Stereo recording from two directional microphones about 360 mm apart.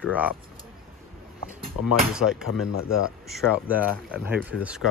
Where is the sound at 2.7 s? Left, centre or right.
Left.